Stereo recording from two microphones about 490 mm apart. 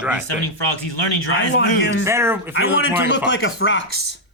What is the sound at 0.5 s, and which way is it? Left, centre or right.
Speech, left.